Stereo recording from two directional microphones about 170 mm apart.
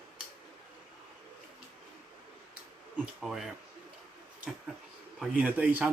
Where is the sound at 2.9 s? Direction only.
5° right (ahead or behind).